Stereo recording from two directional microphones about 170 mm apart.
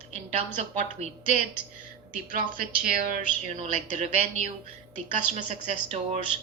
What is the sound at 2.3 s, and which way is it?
A woman's voice, 50° right (ahead or behind).